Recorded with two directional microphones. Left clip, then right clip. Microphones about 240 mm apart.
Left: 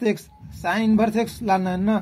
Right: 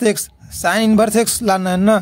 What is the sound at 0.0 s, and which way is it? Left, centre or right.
Speech, right.